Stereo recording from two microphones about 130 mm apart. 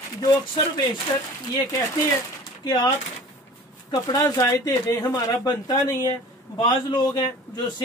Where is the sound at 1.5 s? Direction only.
30° left (ahead or behind).